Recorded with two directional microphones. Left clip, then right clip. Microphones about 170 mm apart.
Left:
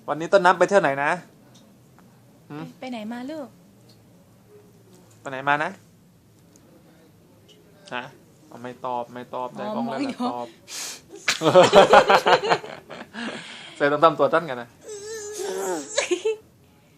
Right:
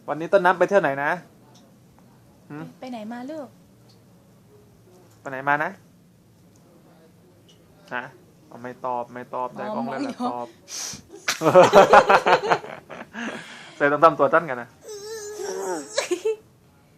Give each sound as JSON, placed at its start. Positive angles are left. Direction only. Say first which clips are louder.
{"t": 0.0, "sound": "speech", "louder": "left 1 dB", "side_deg": 5}
{"t": 2.8, "sound": "a woman's voice", "louder": "left 1 dB", "side_deg": 20}
{"t": 5.2, "sound": "speech", "louder": "even", "side_deg": 0}
{"t": 7.9, "sound": "speech", "louder": "right 1 dB", "side_deg": 0}
{"t": 10.0, "sound": "a woman's voice", "louder": "even", "side_deg": 20}
{"t": 11.3, "sound": "speech", "louder": "right 1 dB", "side_deg": 0}
{"t": 13.4, "sound": "baby cry", "louder": "right 1 dB", "side_deg": 10}
{"t": 15.5, "sound": "giggle", "louder": "left 1 dB", "side_deg": 10}